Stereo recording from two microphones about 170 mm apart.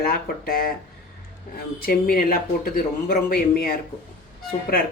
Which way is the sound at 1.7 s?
60° left (ahead or behind).